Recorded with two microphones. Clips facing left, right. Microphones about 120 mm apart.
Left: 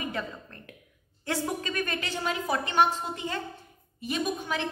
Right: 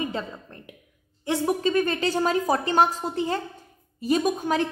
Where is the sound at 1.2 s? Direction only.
20° right (ahead or behind).